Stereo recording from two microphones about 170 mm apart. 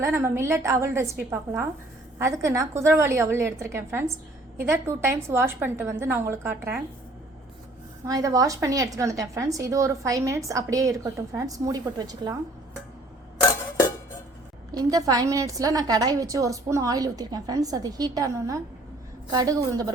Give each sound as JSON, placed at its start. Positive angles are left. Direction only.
{"t": 0.0, "sound": "a woman's voice", "side_deg": -15}
{"t": 2.1, "sound": "a woman's voice", "side_deg": -15}
{"t": 8.0, "sound": "a woman's voice", "side_deg": -20}
{"t": 14.7, "sound": "a woman's voice", "side_deg": -20}